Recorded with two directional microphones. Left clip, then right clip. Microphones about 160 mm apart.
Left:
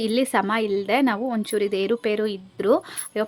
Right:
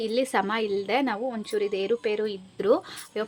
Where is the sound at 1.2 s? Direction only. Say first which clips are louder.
Left 4 dB; 40° left (ahead or behind).